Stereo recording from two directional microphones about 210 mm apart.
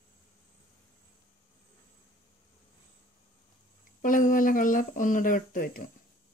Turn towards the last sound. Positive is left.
turn(degrees=40)  # may be behind; listen again after turning